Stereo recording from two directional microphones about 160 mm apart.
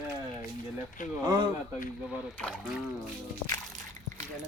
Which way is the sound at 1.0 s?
55° left (ahead or behind).